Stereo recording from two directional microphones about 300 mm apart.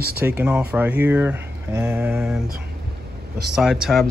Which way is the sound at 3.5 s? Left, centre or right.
Centre.